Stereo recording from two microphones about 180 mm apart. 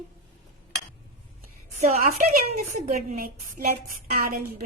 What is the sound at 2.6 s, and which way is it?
A woman's voice, 45° right (ahead or behind).